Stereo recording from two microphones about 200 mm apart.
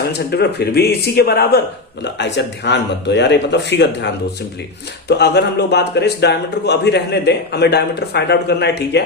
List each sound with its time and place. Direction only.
0.1 s a man's voice: 55° left (ahead or behind)